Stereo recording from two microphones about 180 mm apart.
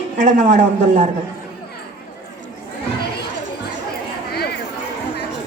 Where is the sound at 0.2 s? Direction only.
45° right (ahead or behind).